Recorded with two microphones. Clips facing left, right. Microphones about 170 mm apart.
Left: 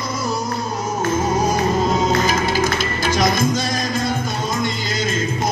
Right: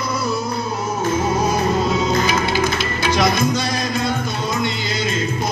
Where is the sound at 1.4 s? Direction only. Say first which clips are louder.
Even; 50° left (ahead or behind).